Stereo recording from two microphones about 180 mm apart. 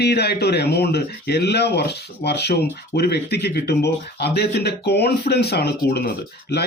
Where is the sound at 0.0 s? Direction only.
65° left (ahead or behind).